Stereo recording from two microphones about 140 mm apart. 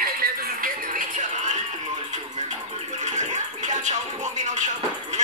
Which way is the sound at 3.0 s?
60° right (ahead or behind).